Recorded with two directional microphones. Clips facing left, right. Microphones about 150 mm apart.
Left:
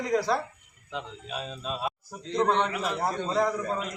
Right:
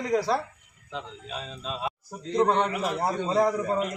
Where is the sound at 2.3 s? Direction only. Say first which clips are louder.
Right 2 dB; 10° right (ahead or behind).